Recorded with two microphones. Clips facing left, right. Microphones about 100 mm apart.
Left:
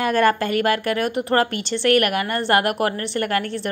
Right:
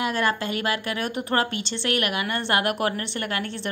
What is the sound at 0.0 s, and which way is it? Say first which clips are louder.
Speech: left 6 dB; 50° left (ahead or behind).